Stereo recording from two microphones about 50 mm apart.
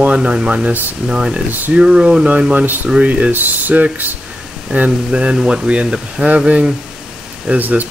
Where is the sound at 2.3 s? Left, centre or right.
Right.